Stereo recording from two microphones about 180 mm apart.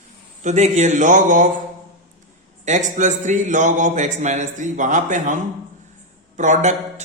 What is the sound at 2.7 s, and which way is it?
A man's voice, 45° right (ahead or behind).